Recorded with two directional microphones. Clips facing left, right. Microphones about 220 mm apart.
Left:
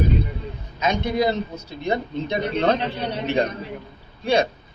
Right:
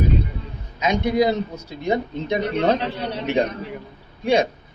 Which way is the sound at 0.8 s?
15° right (ahead or behind).